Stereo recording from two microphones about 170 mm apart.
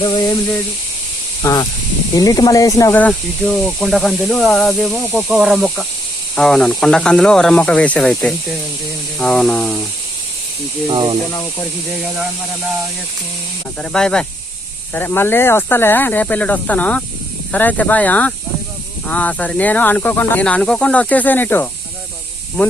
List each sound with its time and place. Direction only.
0.0 s hiss: 30° left (ahead or behind)
1.4 s speech: 20° left (ahead or behind); by 9.8 s 5° left (ahead or behind)
10.8 s speech: 25° right (ahead or behind)
13.9 s speech: 5° left (ahead or behind)